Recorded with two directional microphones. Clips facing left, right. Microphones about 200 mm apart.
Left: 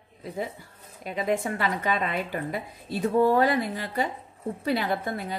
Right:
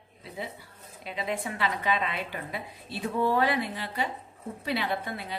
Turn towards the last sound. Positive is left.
turn(degrees=45)  # may be behind; listen again after turning